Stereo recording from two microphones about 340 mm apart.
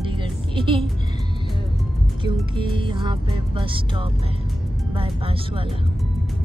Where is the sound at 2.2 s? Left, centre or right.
Centre.